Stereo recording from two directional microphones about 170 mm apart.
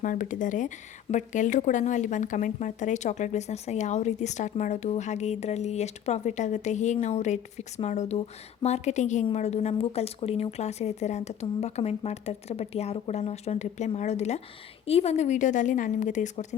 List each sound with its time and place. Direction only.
0.0 s a woman's voice: 50° left (ahead or behind)